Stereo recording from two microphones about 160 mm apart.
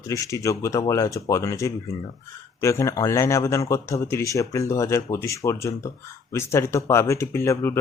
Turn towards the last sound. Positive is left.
turn(degrees=15)  # may be behind; listen again after turning